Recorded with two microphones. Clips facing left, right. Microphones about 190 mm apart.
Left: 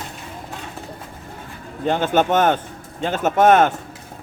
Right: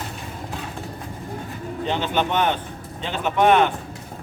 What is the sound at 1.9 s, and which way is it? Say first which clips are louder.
Speech: left 6 dB; 45° left (ahead or behind).